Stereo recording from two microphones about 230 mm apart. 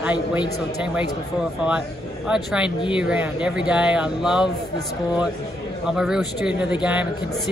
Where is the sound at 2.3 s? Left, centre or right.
Centre.